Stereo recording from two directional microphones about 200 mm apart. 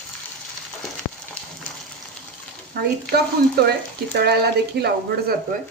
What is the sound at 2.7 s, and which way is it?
Speech, 50° right (ahead or behind).